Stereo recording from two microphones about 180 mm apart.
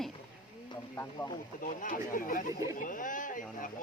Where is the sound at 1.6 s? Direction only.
50° left (ahead or behind).